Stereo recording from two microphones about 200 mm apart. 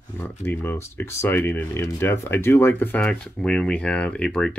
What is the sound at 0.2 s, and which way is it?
Speech, 10° left (ahead or behind).